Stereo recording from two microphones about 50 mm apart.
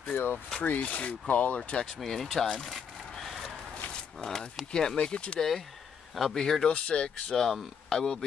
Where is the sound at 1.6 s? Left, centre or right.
Centre.